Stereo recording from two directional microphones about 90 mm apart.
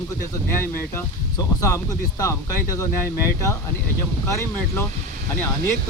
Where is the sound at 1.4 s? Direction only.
40° left (ahead or behind).